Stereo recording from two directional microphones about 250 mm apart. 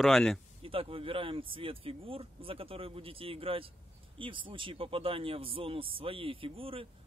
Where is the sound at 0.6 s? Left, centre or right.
Right.